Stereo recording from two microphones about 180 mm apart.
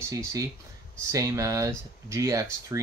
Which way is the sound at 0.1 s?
20° right (ahead or behind).